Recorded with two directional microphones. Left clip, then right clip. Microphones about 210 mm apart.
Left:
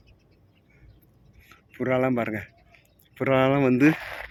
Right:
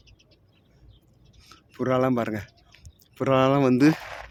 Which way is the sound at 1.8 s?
10° right (ahead or behind).